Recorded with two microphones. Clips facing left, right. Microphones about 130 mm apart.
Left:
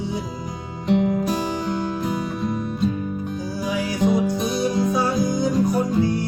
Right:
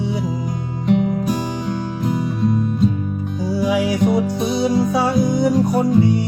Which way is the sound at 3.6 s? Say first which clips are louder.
Right 4 dB; 85° right.